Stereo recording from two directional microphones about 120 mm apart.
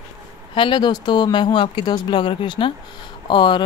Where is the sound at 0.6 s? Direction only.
40° left (ahead or behind).